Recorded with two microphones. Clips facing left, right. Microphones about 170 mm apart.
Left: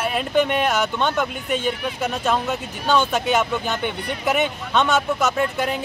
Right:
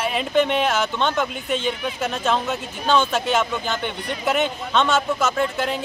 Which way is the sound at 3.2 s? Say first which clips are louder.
Left 1 dB; 10° left (ahead or behind).